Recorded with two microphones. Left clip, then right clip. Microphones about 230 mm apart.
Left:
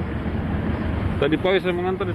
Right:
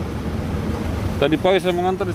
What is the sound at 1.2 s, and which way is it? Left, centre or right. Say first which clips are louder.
Speech: right 3 dB; right.